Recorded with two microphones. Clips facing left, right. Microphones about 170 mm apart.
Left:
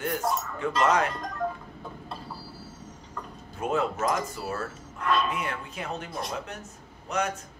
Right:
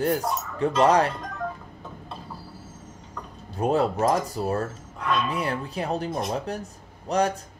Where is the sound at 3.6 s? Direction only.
35° right (ahead or behind).